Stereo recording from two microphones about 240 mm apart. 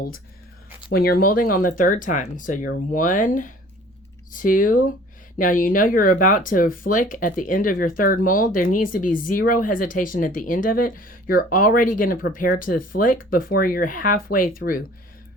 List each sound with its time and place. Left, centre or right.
0.9 s speech: left